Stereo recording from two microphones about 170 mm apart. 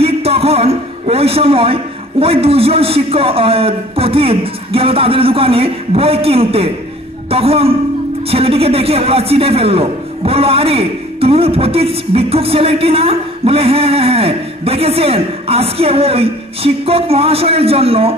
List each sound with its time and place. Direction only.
0.0 s a man's voice: 35° right (ahead or behind)